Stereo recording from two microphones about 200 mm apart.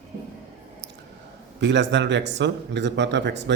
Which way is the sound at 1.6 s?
60° right (ahead or behind).